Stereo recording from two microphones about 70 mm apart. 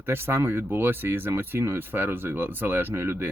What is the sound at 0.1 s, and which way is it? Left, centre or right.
Speech, right.